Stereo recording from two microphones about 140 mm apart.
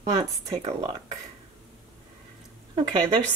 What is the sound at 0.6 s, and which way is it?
Speech, 45° right (ahead or behind).